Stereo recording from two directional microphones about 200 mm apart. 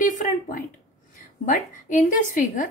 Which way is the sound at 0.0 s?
40° left (ahead or behind).